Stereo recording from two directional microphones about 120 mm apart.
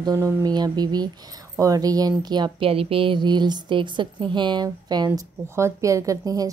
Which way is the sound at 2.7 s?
50° right (ahead or behind).